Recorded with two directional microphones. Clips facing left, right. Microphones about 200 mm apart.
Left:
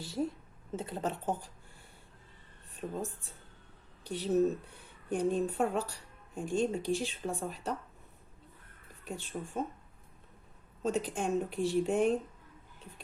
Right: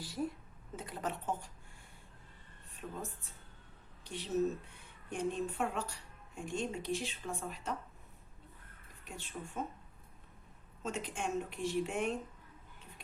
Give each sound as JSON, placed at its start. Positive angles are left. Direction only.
{"t": 0.0, "sound": "a sound", "side_deg": 25}
{"t": 0.8, "sound": "speech", "side_deg": 25}
{"t": 2.7, "sound": "speech", "side_deg": 30}
{"t": 9.0, "sound": "speech", "side_deg": 35}
{"t": 10.8, "sound": "speech", "side_deg": 35}